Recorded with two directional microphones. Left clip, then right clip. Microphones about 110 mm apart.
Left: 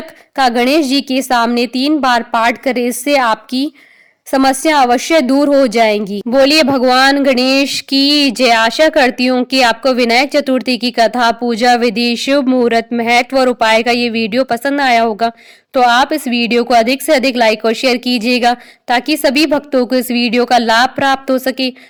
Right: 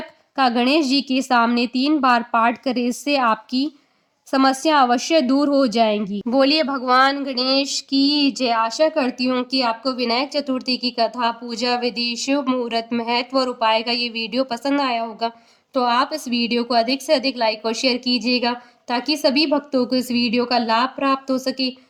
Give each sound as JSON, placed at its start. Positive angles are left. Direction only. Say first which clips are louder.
{"t": 0.3, "sound": "a woman's voice", "louder": "left 6 dB", "side_deg": 45}
{"t": 2.4, "sound": "a woman's voice", "louder": "left 6 dB", "side_deg": 40}